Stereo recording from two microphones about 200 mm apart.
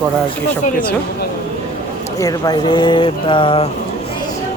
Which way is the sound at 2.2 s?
20° left (ahead or behind).